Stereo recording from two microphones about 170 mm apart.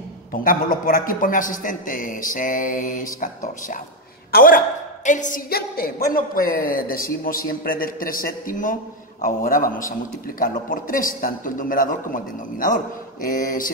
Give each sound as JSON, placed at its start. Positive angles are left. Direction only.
{"t": 0.3, "sound": "a man's voice", "side_deg": 55}